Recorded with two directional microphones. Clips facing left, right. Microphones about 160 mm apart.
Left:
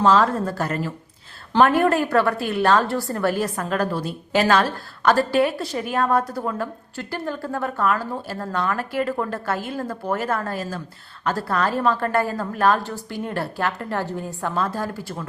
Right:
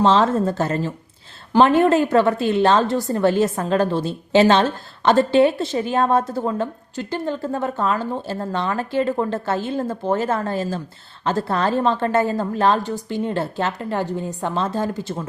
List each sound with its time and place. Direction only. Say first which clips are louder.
0.0 s a woman's voice: right 2 dB; 25° right (ahead or behind)